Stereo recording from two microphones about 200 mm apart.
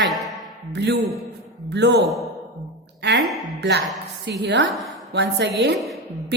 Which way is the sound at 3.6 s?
55° right (ahead or behind).